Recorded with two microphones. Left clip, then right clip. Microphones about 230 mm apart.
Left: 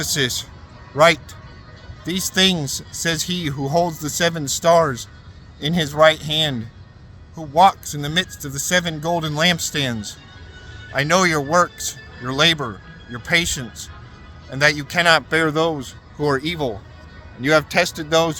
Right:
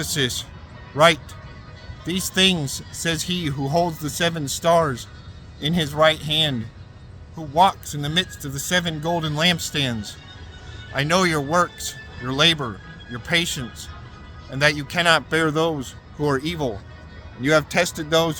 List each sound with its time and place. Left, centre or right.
0.0 s speech: left